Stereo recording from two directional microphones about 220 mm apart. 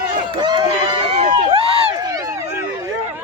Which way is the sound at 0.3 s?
20° right (ahead or behind).